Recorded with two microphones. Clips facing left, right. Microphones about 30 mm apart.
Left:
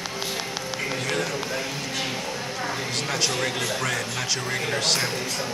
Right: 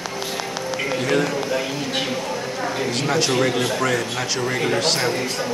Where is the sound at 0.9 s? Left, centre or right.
Centre.